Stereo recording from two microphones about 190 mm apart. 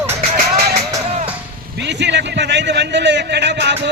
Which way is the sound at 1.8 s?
65° right (ahead or behind).